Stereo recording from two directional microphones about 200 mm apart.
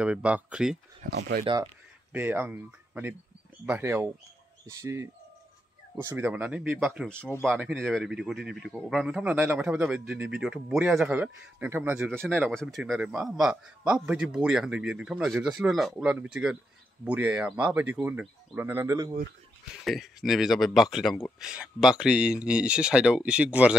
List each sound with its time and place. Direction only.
0.0 s speech: 5° right (ahead or behind)
1.0 s speech: 45° right (ahead or behind)
1.4 s speech: 20° right (ahead or behind)
2.1 s speech: 10° right (ahead or behind)
7.2 s speech: 10° left (ahead or behind)
7.4 s speech: 5° right (ahead or behind)
12.1 s speech: 5° left (ahead or behind); by 19.1 s 15° right (ahead or behind)
19.8 s speech: centre (ahead or behind)